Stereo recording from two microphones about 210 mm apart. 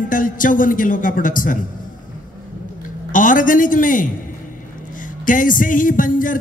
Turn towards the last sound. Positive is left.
turn(degrees=40)  # may be behind; listen again after turning